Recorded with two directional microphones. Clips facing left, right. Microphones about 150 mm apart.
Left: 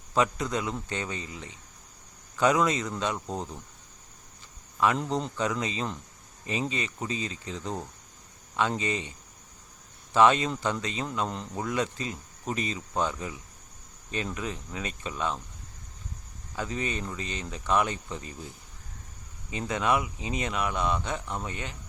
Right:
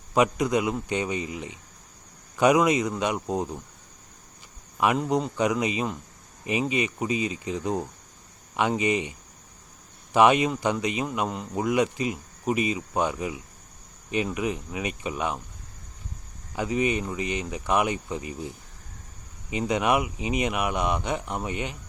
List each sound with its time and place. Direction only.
0.1 s speech: 15° right (ahead or behind)
4.9 s speech: 10° right (ahead or behind)
16.5 s speech: 15° right (ahead or behind)